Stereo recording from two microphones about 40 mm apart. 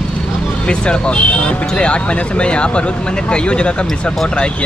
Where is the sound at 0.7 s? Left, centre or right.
Left.